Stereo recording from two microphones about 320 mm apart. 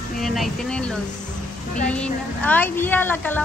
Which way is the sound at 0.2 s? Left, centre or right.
Centre.